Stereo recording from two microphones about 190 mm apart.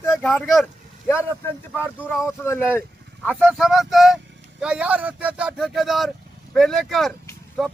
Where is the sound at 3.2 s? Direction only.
Centre (ahead or behind).